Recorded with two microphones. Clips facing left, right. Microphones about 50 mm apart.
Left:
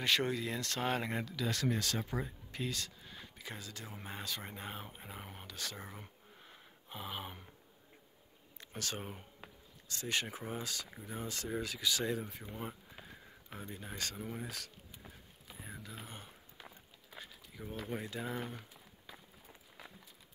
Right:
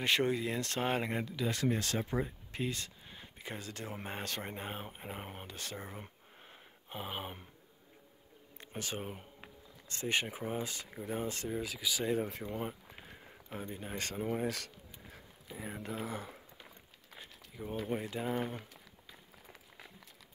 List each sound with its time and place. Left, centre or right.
0.0 s speech: right
4.4 s speech: right
5.8 s a sound: right
8.5 s a sound: centre
9.8 s speech: right
10.2 s speech: centre; by 11.4 s right
11.5 s speech: centre
12.2 s speech: right
13.5 s speech: right
15.7 s speech: right
17.1 s a sound: right
17.7 s speech: centre